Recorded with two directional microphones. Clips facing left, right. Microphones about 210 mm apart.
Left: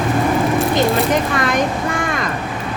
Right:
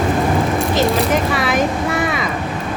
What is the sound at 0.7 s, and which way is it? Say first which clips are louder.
Speech: even; 5° right (ahead or behind).